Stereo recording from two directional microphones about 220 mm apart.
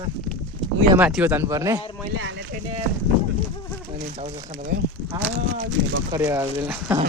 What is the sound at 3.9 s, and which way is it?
Speech, 30° right (ahead or behind).